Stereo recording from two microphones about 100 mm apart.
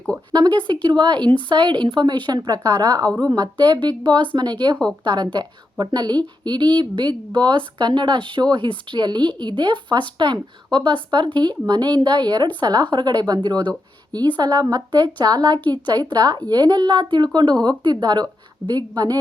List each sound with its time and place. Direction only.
0.3 s a woman's voice: 50° right (ahead or behind)